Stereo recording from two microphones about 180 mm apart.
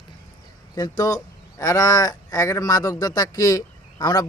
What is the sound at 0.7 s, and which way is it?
Speech, 20° left (ahead or behind).